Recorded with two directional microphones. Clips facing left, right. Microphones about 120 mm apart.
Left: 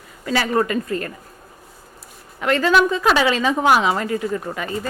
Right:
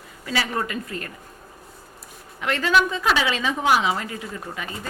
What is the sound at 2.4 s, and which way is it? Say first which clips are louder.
A woman's voice: left 4 dB; 45° left (ahead or behind).